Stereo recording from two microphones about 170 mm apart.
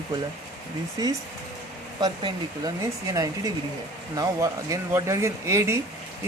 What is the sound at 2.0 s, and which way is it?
Speech, 25° right (ahead or behind).